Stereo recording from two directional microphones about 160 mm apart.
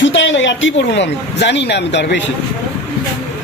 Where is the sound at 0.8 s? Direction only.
90° left.